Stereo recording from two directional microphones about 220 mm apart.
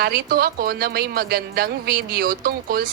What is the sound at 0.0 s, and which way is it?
A woman's voice, 45° right (ahead or behind).